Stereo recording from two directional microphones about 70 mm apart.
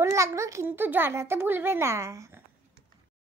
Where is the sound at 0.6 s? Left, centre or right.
Right.